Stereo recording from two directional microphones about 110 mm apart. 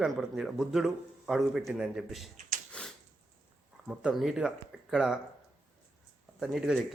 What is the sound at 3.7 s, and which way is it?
Speech, 5° right (ahead or behind).